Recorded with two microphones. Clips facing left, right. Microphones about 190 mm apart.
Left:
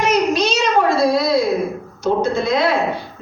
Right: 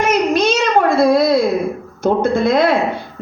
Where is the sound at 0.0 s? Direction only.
55° right (ahead or behind).